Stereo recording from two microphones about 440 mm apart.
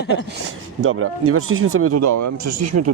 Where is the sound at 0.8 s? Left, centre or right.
Right.